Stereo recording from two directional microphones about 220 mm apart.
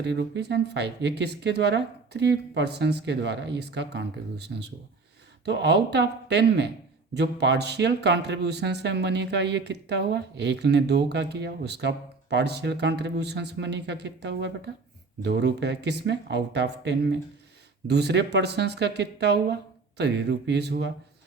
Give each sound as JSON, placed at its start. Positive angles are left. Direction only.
{"t": 0.0, "sound": "speech", "side_deg": -50}